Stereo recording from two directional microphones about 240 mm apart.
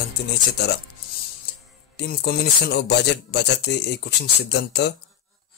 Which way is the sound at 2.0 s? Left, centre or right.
Left.